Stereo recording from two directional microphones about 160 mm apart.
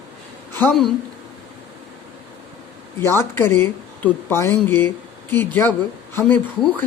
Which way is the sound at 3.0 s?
15° left (ahead or behind).